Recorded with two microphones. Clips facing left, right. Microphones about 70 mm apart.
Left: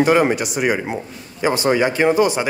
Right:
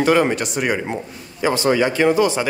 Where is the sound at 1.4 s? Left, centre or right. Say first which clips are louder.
Even; left.